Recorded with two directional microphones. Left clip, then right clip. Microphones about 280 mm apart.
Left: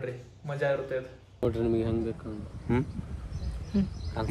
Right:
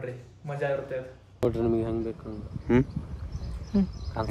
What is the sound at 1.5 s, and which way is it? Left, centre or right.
Speech, right.